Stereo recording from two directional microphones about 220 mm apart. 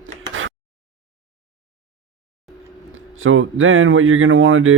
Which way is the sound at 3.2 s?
65° right (ahead or behind).